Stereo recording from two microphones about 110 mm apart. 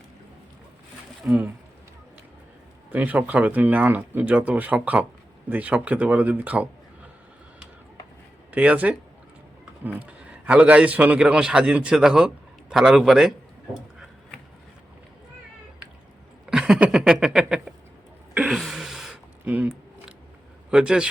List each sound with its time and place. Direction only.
1.2 s a man's voice: 15° right (ahead or behind)
2.9 s a man's voice: 15° right (ahead or behind)
8.5 s a man's voice: 15° right (ahead or behind)
16.5 s a sound: 5° right (ahead or behind)
20.7 s speech: 5° right (ahead or behind)